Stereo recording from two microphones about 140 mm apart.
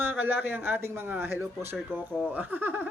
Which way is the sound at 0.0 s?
15° right (ahead or behind).